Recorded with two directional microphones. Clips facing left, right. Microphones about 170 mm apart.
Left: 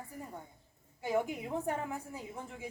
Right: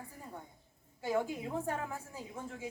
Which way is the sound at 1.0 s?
15° left (ahead or behind).